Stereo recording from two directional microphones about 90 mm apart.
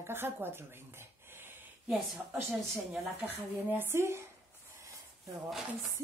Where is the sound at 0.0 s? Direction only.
25° right (ahead or behind).